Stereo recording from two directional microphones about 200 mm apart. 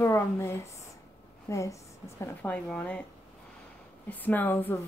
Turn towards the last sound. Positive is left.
turn(degrees=10)  # may be behind; listen again after turning